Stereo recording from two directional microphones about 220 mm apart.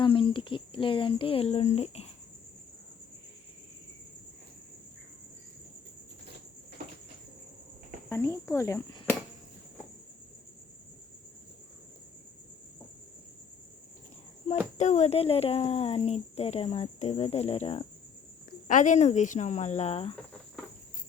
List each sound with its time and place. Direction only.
0.0 s speech: 25° left (ahead or behind)
8.1 s speech: 10° left (ahead or behind)
14.5 s a woman's voice: 25° left (ahead or behind)